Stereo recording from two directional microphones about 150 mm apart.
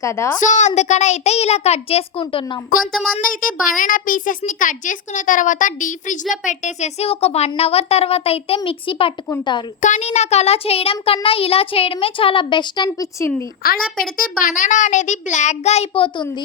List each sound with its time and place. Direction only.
0.0 s a woman's voice: 20° left (ahead or behind)
0.3 s a woman's voice: 55° left (ahead or behind); by 2.4 s 40° left (ahead or behind)
2.7 s a woman's voice: 70° left (ahead or behind); by 9.1 s 35° left (ahead or behind)
9.8 s a child's voice: 50° left (ahead or behind); by 13.3 s 20° left (ahead or behind)
13.6 s a woman's voice: 85° left
14.2 s a child's voice: 60° left (ahead or behind); by 16.0 s 45° left (ahead or behind)